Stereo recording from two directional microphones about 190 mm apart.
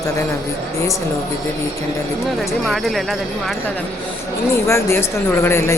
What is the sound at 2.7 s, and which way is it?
Speech, centre (ahead or behind).